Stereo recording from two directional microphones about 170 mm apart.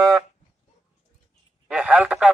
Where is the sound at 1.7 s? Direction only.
5° right (ahead or behind).